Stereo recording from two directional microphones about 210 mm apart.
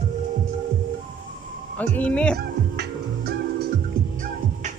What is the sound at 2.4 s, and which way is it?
Music, 50° right (ahead or behind).